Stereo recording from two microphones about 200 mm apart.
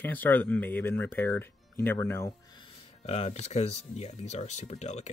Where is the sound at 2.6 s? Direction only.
30° left (ahead or behind).